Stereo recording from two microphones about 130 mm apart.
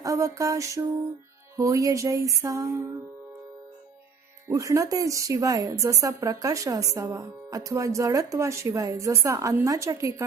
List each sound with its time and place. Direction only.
0.0 s a sound: 25° right (ahead or behind)
1.5 s a woman's voice: 25° right (ahead or behind)
4.4 s a woman's voice: 25° right (ahead or behind)